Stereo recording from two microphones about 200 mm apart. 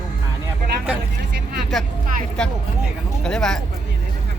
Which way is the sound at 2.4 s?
5° left (ahead or behind).